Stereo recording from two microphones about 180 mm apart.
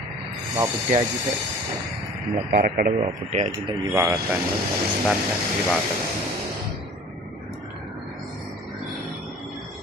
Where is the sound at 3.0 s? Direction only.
40° right (ahead or behind).